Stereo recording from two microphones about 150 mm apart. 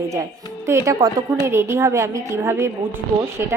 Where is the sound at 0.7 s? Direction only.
20° right (ahead or behind).